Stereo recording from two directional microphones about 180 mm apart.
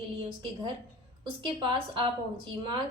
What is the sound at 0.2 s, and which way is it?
A woman's voice, 30° right (ahead or behind).